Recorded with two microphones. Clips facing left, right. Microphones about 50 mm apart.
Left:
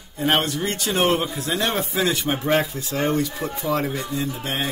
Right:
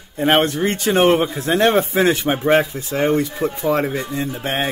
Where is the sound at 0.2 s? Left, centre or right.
Right.